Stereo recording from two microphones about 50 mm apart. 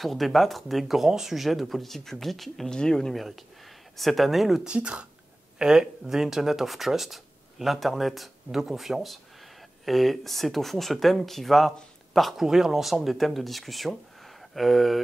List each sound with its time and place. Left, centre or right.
0.0 s speech: centre
2.7 s speech: centre
4.6 s speech: right; by 12.4 s centre
12.4 s speech: centre